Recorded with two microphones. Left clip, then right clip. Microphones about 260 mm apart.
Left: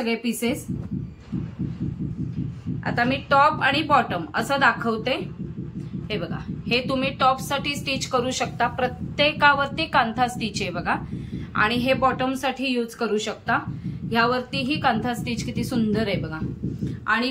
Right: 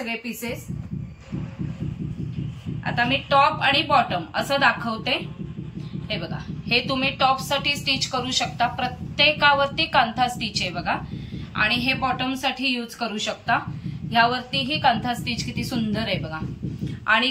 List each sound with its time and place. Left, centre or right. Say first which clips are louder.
0.0 s speech: left 4 dB; left
2.8 s a woman's voice: right 1 dB; centre